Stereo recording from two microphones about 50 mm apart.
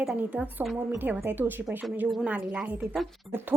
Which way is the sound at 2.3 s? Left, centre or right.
Right.